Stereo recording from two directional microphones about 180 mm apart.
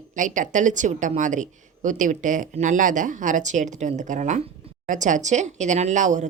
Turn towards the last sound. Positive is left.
turn(degrees=-45)  # may be behind; listen again after turning